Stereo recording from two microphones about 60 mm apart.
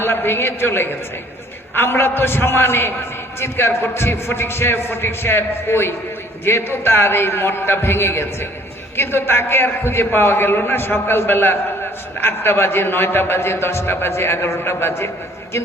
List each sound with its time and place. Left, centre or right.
0.0 s a man's voice: left